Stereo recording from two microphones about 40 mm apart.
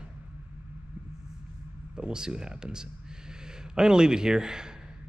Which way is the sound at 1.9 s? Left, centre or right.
Centre.